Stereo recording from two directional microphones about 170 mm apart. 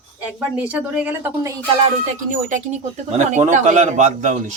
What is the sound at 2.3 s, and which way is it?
Speech, 45° right (ahead or behind).